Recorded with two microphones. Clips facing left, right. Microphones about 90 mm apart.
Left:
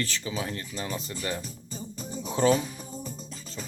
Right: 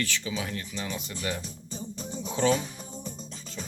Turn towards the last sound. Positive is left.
turn(degrees=5)  # may be behind; listen again after turning